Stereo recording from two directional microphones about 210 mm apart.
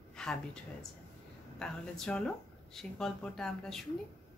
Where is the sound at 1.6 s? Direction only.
Centre (ahead or behind).